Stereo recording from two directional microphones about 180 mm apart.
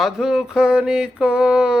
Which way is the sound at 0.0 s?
5° right (ahead or behind).